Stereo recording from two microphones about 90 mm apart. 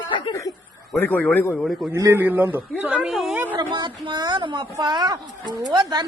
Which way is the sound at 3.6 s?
60° right (ahead or behind).